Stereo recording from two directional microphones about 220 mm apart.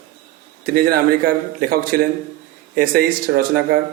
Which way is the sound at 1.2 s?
40° right (ahead or behind).